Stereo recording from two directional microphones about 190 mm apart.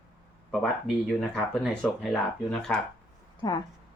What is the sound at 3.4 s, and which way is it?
Speech, 20° left (ahead or behind).